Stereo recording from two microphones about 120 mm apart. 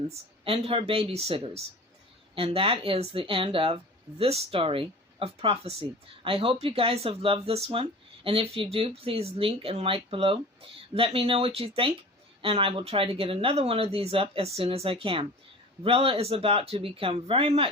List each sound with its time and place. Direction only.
0.1 s speech: 55° right (ahead or behind)